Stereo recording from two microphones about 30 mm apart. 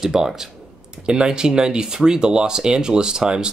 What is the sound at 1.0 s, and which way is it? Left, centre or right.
Speech, right.